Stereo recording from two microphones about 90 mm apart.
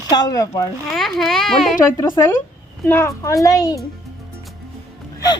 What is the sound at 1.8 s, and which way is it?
Speech, 35° left (ahead or behind).